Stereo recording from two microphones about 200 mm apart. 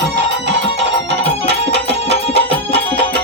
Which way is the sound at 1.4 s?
60° right (ahead or behind).